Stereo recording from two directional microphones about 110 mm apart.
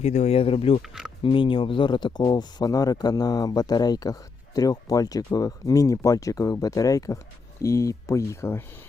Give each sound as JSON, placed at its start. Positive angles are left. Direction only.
{"t": 0.0, "sound": "speech", "side_deg": 85}
{"t": 0.8, "sound": "speech", "side_deg": -5}
{"t": 1.2, "sound": "speech", "side_deg": 50}